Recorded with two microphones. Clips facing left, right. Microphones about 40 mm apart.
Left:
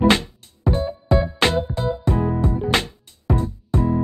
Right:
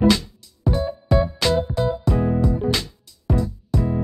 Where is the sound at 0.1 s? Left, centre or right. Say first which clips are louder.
Left 2 dB; left.